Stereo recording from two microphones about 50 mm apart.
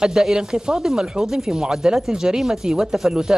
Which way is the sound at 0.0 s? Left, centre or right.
Centre.